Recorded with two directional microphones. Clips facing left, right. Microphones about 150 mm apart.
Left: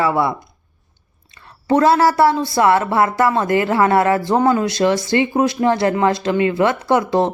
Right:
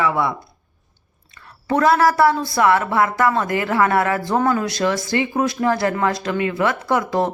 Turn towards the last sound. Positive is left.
turn(degrees=25)  # may be behind; listen again after turning